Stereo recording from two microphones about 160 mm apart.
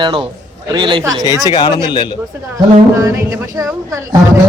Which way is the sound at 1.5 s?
30° left (ahead or behind).